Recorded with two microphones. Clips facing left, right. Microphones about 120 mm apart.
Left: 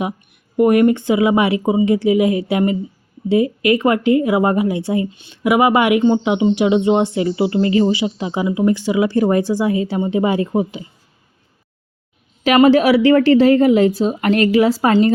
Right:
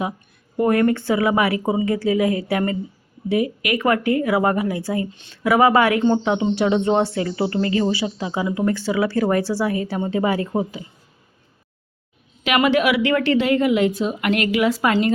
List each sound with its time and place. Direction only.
0.5 s speech: 20° left (ahead or behind)
12.4 s speech: 35° left (ahead or behind)